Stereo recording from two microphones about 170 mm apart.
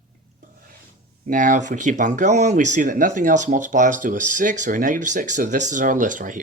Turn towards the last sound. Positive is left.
turn(degrees=-50)  # may be behind; listen again after turning